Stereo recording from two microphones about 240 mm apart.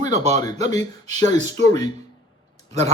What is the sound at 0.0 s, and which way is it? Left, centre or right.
Speech, right.